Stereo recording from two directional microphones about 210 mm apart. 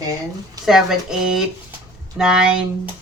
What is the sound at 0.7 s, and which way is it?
Speech, centre (ahead or behind).